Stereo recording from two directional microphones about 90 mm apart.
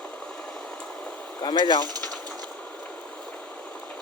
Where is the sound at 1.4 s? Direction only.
55° left (ahead or behind).